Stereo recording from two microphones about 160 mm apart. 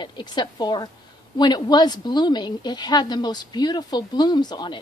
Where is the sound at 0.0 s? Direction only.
30° left (ahead or behind).